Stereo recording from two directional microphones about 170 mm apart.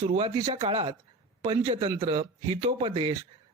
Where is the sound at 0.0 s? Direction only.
35° right (ahead or behind).